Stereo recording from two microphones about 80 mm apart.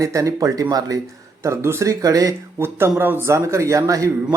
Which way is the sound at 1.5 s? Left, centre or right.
Right.